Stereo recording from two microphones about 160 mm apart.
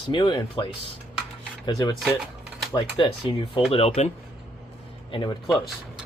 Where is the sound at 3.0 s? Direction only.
30° left (ahead or behind).